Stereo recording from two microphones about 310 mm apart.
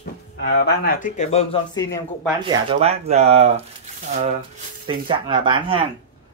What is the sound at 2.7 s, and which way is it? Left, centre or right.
Speech, centre.